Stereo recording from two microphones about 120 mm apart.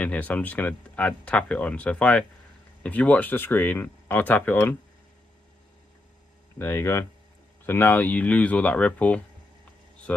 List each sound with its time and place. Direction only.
0.0 s speech: 15° left (ahead or behind)
6.6 s speech: 20° left (ahead or behind)